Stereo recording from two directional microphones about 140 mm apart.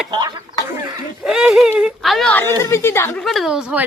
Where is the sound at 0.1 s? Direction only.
30° right (ahead or behind).